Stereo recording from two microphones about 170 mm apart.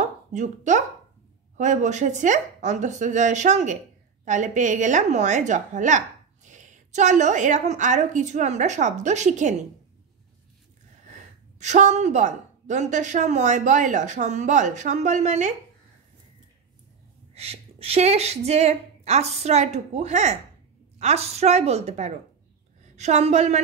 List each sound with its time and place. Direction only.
0.0 s a woman's voice: 45° right (ahead or behind)
11.6 s a woman's voice: 45° right (ahead or behind)
17.3 s a woman's voice: 35° right (ahead or behind)